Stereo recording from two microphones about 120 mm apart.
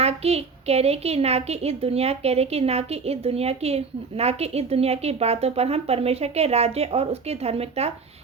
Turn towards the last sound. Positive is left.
turn(degrees=-60)  # may be behind; listen again after turning